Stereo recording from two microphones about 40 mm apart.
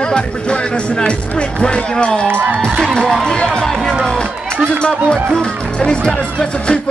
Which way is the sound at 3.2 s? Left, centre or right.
Left.